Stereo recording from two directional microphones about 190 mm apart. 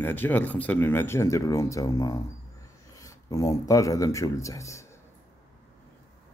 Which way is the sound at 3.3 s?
15° left (ahead or behind).